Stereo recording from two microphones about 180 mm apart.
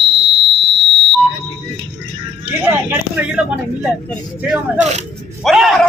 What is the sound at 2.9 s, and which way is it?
Speech, 10° right (ahead or behind).